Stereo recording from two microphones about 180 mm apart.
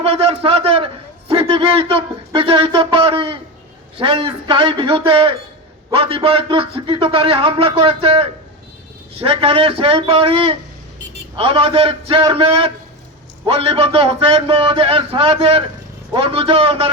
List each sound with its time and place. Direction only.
0.0 s a man's voice: 30° right (ahead or behind)